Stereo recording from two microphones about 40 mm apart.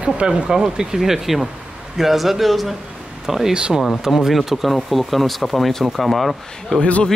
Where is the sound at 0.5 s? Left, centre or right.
Centre.